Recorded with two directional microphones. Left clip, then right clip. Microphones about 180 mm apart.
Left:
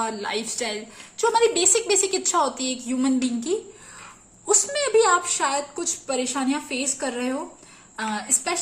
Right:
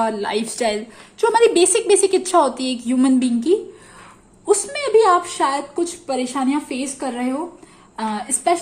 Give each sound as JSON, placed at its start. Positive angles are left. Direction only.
{"t": 0.0, "sound": "a woman's voice", "side_deg": -30}
{"t": 7.9, "sound": "a woman's voice", "side_deg": -30}